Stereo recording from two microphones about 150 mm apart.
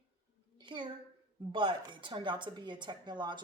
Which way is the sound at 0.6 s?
30° right (ahead or behind).